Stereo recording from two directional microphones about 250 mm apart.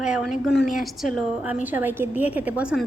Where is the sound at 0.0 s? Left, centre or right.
Centre.